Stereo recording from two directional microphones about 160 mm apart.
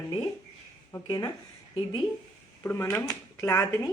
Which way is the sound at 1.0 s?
25° left (ahead or behind).